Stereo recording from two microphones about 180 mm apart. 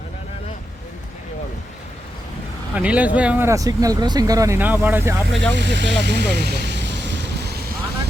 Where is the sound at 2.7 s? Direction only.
5° right (ahead or behind).